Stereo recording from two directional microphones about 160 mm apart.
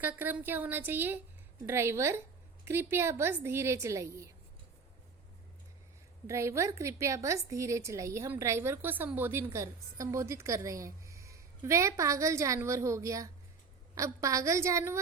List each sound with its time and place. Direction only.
0.0 s a woman's voice: 10° right (ahead or behind)
6.2 s a woman's voice: 15° right (ahead or behind)